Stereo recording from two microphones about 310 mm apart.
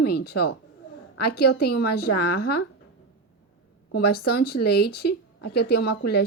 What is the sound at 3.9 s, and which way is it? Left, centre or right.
A woman's voice, left.